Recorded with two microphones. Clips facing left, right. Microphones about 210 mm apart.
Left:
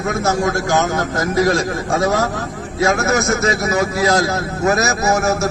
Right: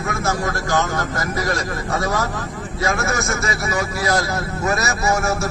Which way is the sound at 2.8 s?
45° left (ahead or behind).